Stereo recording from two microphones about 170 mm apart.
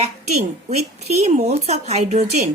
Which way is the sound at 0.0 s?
40° right (ahead or behind).